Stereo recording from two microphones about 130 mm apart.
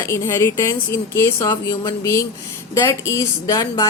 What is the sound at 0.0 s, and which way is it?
A woman's voice, 20° left (ahead or behind).